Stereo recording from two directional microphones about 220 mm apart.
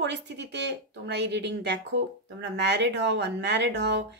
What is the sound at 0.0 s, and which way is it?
Speech, 50° right (ahead or behind).